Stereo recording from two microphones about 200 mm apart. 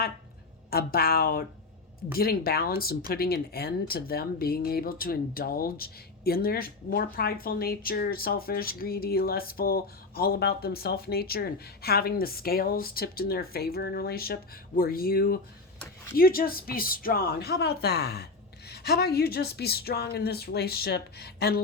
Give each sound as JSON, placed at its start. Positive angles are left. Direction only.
{"t": 0.7, "sound": "speech", "side_deg": 50}